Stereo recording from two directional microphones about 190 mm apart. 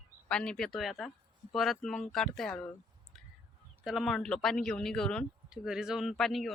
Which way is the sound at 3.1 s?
Centre (ahead or behind).